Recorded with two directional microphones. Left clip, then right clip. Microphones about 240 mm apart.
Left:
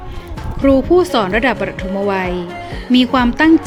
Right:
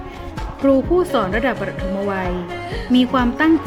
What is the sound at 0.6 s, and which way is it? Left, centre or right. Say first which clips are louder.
A woman's voice: left 4 dB; left.